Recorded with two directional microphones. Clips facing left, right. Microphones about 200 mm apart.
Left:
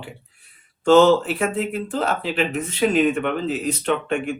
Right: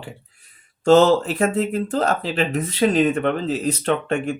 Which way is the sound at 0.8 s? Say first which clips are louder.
Even; 40° right (ahead or behind).